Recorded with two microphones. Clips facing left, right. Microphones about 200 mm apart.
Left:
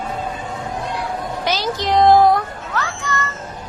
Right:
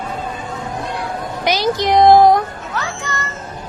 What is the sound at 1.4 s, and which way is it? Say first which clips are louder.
Music: right 6 dB; 15° right (ahead or behind).